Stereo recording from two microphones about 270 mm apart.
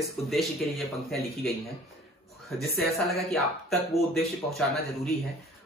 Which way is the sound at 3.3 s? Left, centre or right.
Centre.